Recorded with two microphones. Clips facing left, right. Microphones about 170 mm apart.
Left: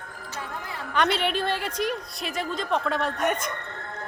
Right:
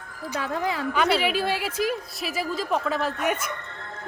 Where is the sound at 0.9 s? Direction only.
5° right (ahead or behind).